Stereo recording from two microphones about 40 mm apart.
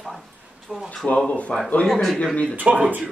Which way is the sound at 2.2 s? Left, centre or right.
Left.